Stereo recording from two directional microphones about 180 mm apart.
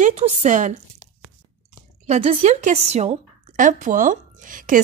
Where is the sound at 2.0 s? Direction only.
35° right (ahead or behind).